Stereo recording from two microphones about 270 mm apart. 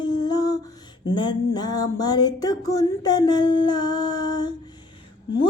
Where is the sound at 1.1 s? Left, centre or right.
Centre.